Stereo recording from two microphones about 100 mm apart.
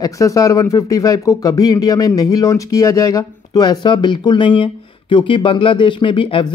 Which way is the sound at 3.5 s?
50° left (ahead or behind).